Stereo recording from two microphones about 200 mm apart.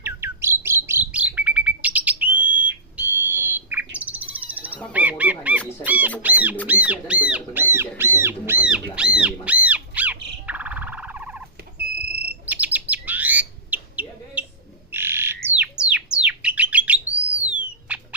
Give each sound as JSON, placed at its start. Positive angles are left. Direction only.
{"t": 0.0, "sound": "bird", "side_deg": -10}
{"t": 4.9, "sound": "speech", "side_deg": -5}
{"t": 11.8, "sound": "a sound", "side_deg": -50}
{"t": 12.3, "sound": "bird", "side_deg": -10}
{"t": 17.5, "sound": "owl", "side_deg": -5}